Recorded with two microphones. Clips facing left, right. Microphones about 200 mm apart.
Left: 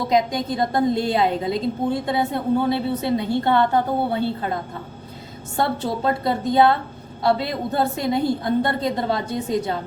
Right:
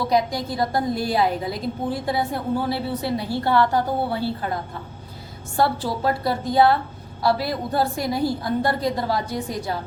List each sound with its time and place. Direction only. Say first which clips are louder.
0.1 s a woman's voice: left 2 dB; 20° left (ahead or behind)
5.5 s a woman's voice: right 1 dB; 20° left (ahead or behind)